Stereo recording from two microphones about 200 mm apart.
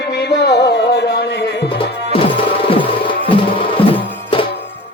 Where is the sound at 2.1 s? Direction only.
25° left (ahead or behind).